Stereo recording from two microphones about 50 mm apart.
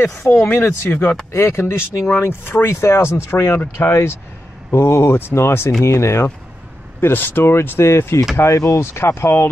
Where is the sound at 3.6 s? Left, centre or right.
Left.